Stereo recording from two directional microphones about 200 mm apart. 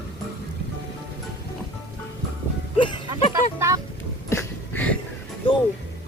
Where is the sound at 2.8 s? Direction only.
25° left (ahead or behind).